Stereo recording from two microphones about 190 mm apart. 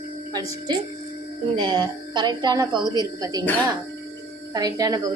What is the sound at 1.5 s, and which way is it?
A woman's voice, 25° right (ahead or behind).